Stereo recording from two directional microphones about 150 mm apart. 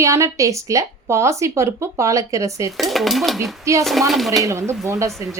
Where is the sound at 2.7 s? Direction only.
Centre (ahead or behind).